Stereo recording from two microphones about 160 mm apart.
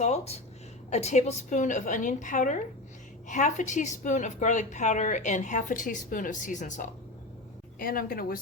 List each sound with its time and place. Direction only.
0.0 s a woman's voice: 40° left (ahead or behind)
7.8 s speech: 65° left (ahead or behind)